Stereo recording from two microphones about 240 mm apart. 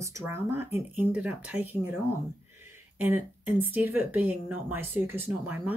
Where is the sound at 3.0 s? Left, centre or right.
Centre.